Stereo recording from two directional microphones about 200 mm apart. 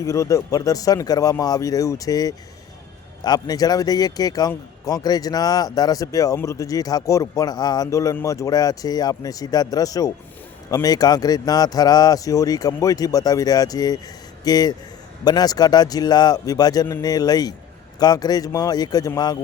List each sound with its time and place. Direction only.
0.0 s speech: 15° left (ahead or behind)